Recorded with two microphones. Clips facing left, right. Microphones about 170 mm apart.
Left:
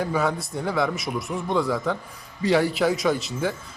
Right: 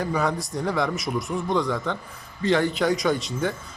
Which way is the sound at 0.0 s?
Centre (ahead or behind).